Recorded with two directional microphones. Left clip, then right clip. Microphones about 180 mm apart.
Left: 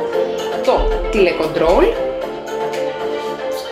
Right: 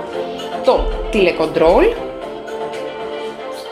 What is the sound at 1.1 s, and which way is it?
Speech, 45° right (ahead or behind).